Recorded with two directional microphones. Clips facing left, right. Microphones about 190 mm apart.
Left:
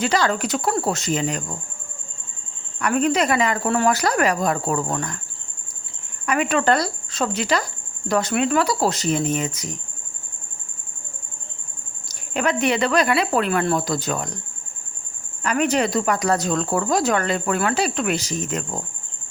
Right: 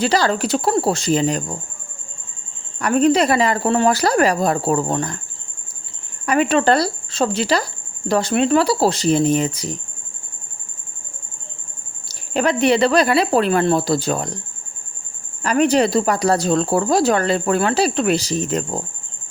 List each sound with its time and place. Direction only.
0.0 s speech: 35° right (ahead or behind)
2.7 s speech: 35° right (ahead or behind)
6.2 s speech: 30° right (ahead or behind)
12.0 s speech: 35° right (ahead or behind)
15.4 s speech: 35° right (ahead or behind)